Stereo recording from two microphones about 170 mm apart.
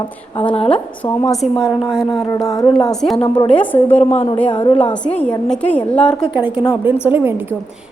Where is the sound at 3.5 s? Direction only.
10° left (ahead or behind).